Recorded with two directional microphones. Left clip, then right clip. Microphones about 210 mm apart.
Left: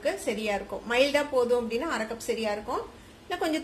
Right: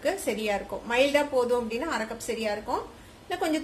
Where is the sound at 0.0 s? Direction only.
Centre (ahead or behind).